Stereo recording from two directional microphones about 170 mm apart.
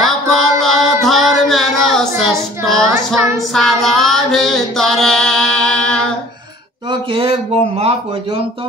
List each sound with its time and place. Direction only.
0.0 s music: centre (ahead or behind)
2.6 s child singing: centre (ahead or behind)
3.5 s music: centre (ahead or behind)
6.9 s a man's voice: 30° right (ahead or behind)